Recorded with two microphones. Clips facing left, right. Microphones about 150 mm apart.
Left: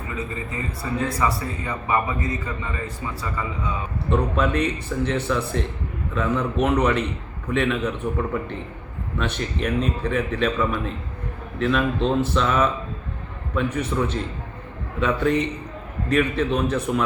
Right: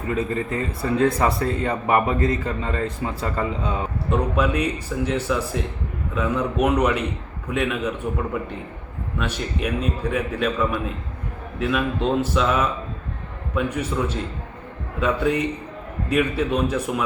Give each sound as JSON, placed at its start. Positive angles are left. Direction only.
{"t": 0.1, "sound": "a man's voice", "side_deg": -60}
{"t": 3.0, "sound": "speech", "side_deg": -65}
{"t": 4.4, "sound": "a man's voice", "side_deg": -10}